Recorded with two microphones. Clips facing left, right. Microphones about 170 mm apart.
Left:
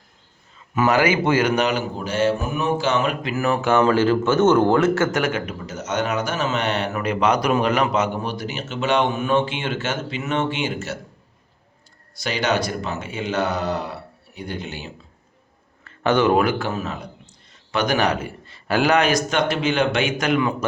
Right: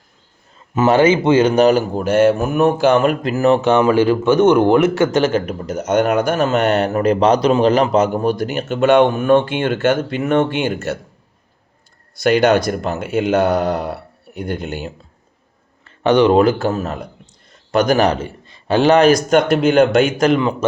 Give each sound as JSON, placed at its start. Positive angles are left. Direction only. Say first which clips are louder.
{"t": 0.7, "sound": "speech", "louder": "right 6 dB", "side_deg": -25}
{"t": 1.6, "sound": "speech", "louder": "right 9 dB", "side_deg": -45}
{"t": 3.4, "sound": "a man's voice", "louder": "right 5 dB", "side_deg": -25}
{"t": 5.5, "sound": "speech", "louder": "right 8 dB", "side_deg": -55}
{"t": 12.2, "sound": "speech", "louder": "right 9 dB", "side_deg": -55}
{"t": 15.8, "sound": "a sound", "louder": "right 6 dB", "side_deg": -20}
{"t": 16.6, "sound": "a man's voice", "louder": "right 6 dB", "side_deg": -45}
{"t": 18.4, "sound": "a sound", "louder": "right 6 dB", "side_deg": -20}
{"t": 19.0, "sound": "speech", "louder": "right 8 dB", "side_deg": -50}